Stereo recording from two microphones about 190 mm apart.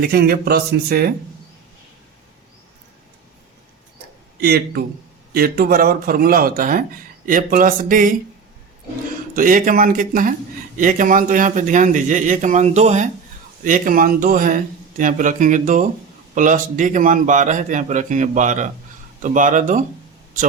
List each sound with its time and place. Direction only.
0.0 s speech: 55° right (ahead or behind)
4.4 s speech: 55° right (ahead or behind)
9.3 s a man's voice: 45° right (ahead or behind)